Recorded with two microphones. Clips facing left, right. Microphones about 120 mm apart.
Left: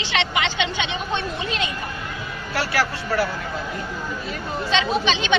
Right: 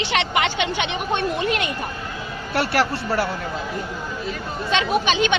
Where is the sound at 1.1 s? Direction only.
50° right (ahead or behind).